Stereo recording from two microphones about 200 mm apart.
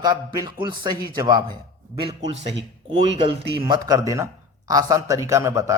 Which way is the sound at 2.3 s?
60° right (ahead or behind).